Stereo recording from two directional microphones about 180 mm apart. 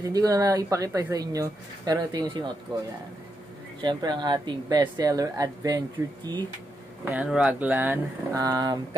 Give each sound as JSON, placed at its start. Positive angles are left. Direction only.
{"t": 0.0, "sound": "speech", "side_deg": -20}
{"t": 3.8, "sound": "speech", "side_deg": -25}
{"t": 6.0, "sound": "speech", "side_deg": -10}